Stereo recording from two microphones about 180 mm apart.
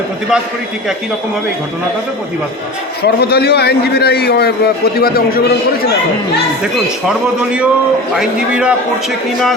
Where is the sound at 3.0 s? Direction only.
60° left (ahead or behind).